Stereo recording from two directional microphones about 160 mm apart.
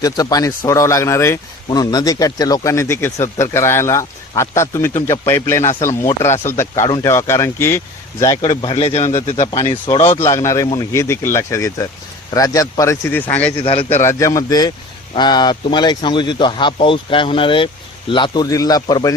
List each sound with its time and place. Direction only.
0.0 s speech: 20° left (ahead or behind)
8.5 s speech: 35° left (ahead or behind)
9.5 s speech: 25° left (ahead or behind)
13.6 s speech: 35° left (ahead or behind)
14.0 s speech: 20° left (ahead or behind)